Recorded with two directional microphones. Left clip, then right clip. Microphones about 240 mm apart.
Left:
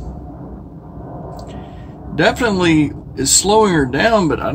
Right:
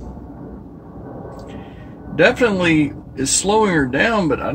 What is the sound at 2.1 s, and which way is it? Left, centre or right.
Speech, centre.